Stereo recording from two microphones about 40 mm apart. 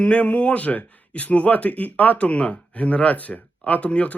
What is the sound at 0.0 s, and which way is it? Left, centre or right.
Speech, left.